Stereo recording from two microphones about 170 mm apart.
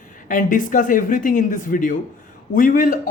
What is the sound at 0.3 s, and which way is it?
Speech, 50° left (ahead or behind).